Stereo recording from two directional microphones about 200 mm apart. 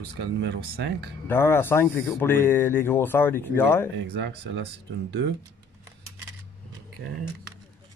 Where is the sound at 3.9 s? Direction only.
60° right (ahead or behind).